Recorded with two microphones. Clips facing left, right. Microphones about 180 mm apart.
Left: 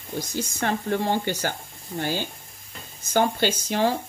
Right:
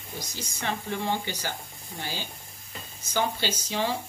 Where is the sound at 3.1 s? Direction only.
55° left (ahead or behind).